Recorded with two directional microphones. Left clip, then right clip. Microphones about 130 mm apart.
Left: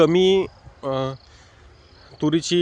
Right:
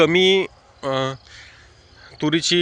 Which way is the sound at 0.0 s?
30° left (ahead or behind).